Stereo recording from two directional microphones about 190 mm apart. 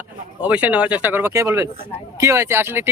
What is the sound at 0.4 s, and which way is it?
Speech, 5° right (ahead or behind).